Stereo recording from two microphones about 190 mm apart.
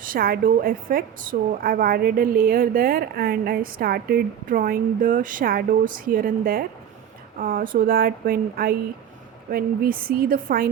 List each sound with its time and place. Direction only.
0.0 s a woman's voice: 50° right (ahead or behind)